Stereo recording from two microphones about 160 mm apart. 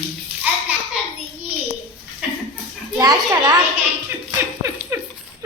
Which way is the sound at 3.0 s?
25° right (ahead or behind).